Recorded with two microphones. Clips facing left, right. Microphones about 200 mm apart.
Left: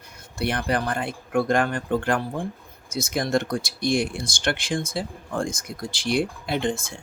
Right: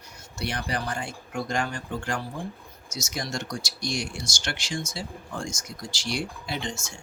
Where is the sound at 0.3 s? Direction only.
55° left (ahead or behind).